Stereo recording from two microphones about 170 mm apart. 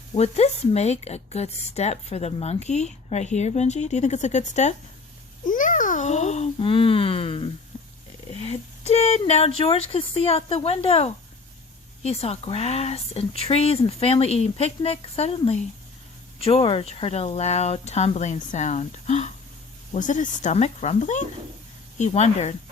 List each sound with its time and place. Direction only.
0.2 s speech: 40° left (ahead or behind)